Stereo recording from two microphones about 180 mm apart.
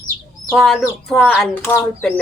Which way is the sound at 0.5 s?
Centre (ahead or behind).